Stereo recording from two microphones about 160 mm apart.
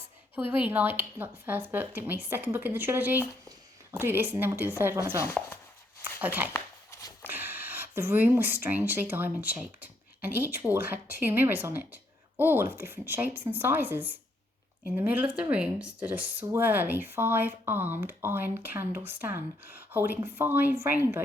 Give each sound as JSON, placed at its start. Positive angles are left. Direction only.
{"t": 0.3, "sound": "speech", "side_deg": -10}
{"t": 5.2, "sound": "speech", "side_deg": 15}
{"t": 6.1, "sound": "speech", "side_deg": -10}
{"t": 6.5, "sound": "a sound", "side_deg": 15}
{"t": 7.3, "sound": "speech", "side_deg": -10}